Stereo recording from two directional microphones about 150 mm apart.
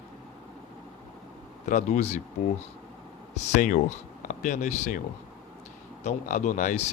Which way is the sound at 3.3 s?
50° left (ahead or behind).